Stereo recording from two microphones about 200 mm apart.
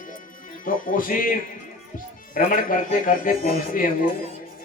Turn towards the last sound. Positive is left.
turn(degrees=45)  # may be behind; listen again after turning